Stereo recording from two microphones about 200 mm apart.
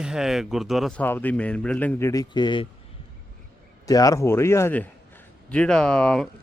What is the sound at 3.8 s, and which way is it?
A man's voice, 20° left (ahead or behind).